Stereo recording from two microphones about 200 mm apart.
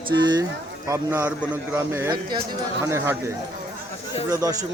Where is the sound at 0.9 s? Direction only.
10° right (ahead or behind).